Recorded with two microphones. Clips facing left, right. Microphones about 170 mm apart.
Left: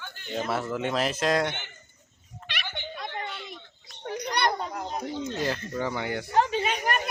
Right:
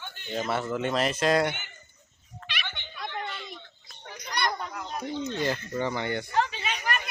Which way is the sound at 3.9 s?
65° left (ahead or behind).